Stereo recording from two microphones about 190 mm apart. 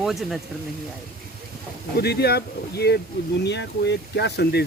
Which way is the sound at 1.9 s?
60° left (ahead or behind).